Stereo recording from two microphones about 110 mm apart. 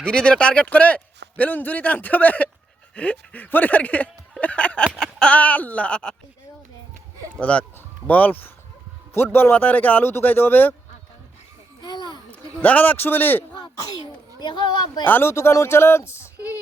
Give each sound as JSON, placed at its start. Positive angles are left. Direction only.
{"t": 0.0, "sound": "a man's voice", "side_deg": 10}
{"t": 7.3, "sound": "a man's voice", "side_deg": 10}
{"t": 11.8, "sound": "a sound", "side_deg": 40}
{"t": 12.3, "sound": "a man's voice", "side_deg": 15}
{"t": 13.6, "sound": "speech", "side_deg": 40}
{"t": 15.0, "sound": "speech", "side_deg": 20}